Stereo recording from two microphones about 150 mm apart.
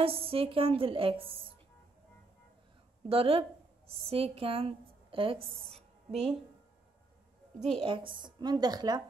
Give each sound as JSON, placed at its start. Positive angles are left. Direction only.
{"t": 0.0, "sound": "a woman's voice", "side_deg": -40}
{"t": 3.1, "sound": "a woman's voice", "side_deg": -40}
{"t": 7.8, "sound": "a woman's voice", "side_deg": -35}